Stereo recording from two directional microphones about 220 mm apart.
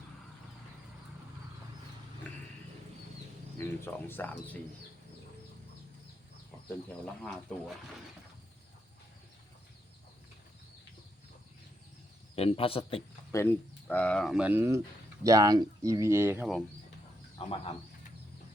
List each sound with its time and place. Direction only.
2.3 s a sound: 5° left (ahead or behind)
3.6 s speech: 10° left (ahead or behind)
7.0 s speech: 5° left (ahead or behind)
12.4 s speech: 25° left (ahead or behind)
13.3 s speech: 10° left (ahead or behind)
17.3 s speech: 25° left (ahead or behind)